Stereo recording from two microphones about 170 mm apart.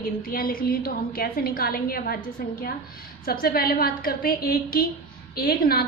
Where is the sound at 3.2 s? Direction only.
60° left (ahead or behind).